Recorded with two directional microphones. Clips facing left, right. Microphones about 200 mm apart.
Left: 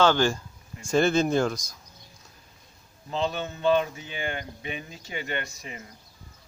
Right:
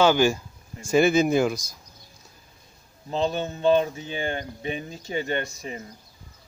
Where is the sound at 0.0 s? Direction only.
10° right (ahead or behind).